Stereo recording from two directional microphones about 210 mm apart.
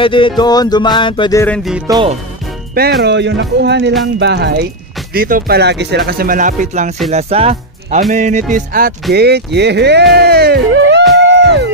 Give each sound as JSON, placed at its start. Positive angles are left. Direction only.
{"t": 0.0, "sound": "music", "side_deg": 25}
{"t": 1.4, "sound": "music", "side_deg": 0}
{"t": 2.7, "sound": "speech", "side_deg": -45}
{"t": 8.1, "sound": "music", "side_deg": -35}
{"t": 9.1, "sound": "speech", "side_deg": -50}
{"t": 10.1, "sound": "music", "side_deg": -50}